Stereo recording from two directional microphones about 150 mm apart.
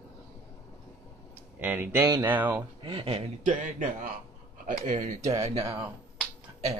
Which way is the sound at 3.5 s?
60° right (ahead or behind).